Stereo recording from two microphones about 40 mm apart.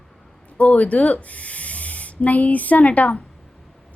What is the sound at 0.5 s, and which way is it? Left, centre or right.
Speech, left.